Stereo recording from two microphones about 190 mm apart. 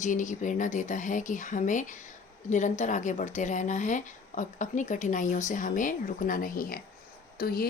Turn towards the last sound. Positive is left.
turn(degrees=50)  # may be behind; listen again after turning